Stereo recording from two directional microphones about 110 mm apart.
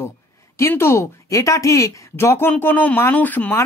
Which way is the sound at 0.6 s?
20° left (ahead or behind).